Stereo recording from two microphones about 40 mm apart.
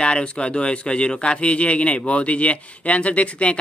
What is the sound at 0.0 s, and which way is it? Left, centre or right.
Speech, left.